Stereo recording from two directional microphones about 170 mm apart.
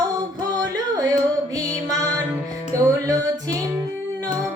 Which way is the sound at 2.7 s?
20° right (ahead or behind).